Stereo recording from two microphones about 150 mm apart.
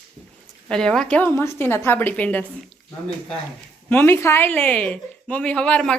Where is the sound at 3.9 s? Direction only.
15° left (ahead or behind).